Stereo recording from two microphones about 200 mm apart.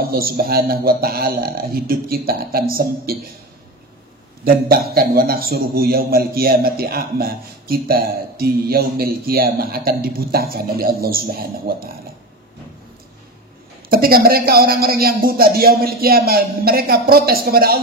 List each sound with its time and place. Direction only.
0.0 s a man's voice: 50° right (ahead or behind)
4.5 s a man's voice: 50° right (ahead or behind)
13.8 s a man's voice: 45° right (ahead or behind)